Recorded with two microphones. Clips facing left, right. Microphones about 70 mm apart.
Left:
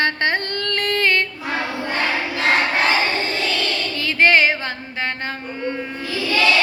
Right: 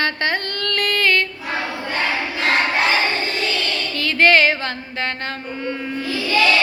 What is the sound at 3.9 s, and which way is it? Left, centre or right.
Female singing, centre.